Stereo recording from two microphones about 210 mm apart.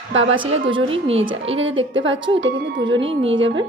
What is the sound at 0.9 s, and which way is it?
Speech, 30° right (ahead or behind).